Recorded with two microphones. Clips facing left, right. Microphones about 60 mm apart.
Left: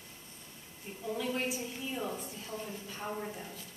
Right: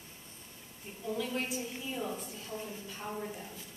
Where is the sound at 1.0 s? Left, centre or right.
Centre.